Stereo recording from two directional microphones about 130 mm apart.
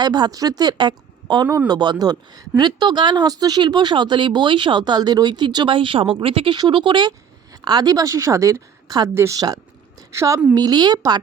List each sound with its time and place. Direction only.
0.0 s a woman's voice: 35° right (ahead or behind)